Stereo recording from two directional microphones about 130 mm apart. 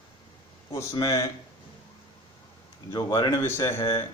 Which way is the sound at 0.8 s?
25° left (ahead or behind).